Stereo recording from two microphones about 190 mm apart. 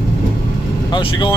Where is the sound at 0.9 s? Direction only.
25° left (ahead or behind).